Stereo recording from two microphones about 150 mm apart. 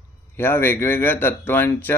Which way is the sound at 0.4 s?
15° left (ahead or behind).